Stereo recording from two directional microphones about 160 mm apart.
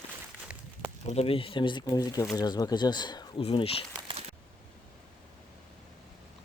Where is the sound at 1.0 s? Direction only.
40° left (ahead or behind).